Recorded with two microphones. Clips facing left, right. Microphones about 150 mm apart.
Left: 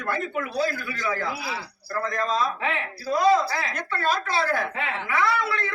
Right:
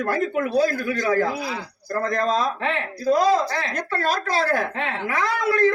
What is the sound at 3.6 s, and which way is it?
A woman's voice, 40° right (ahead or behind).